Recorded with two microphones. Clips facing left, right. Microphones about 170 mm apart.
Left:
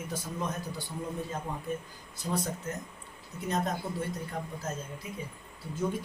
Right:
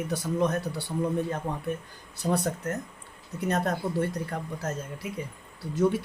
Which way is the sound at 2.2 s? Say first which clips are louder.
Right 6 dB; 65° right (ahead or behind).